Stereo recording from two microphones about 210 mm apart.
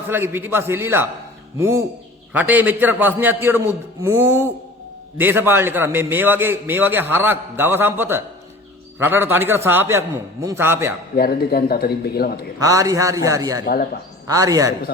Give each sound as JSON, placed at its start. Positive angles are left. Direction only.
{"t": 0.1, "sound": "a man's voice", "side_deg": -10}
{"t": 11.2, "sound": "a man's voice", "side_deg": 45}
{"t": 12.5, "sound": "a man's voice", "side_deg": -15}